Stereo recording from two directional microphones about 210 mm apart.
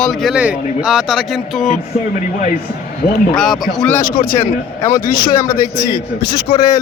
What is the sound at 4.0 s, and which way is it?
Speech, 20° left (ahead or behind).